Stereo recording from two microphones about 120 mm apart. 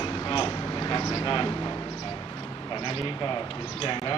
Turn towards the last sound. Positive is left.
turn(degrees=45)  # may be behind; listen again after turning